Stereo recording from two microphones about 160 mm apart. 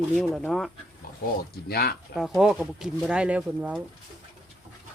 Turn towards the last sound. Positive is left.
turn(degrees=-10)  # may be behind; listen again after turning